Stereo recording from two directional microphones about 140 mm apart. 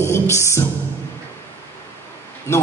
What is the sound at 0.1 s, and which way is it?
Music, 20° left (ahead or behind).